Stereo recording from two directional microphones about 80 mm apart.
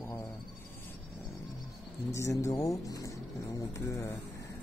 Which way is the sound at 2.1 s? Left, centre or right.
Left.